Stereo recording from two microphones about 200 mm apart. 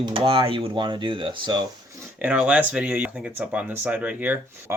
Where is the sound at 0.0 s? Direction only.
25° right (ahead or behind).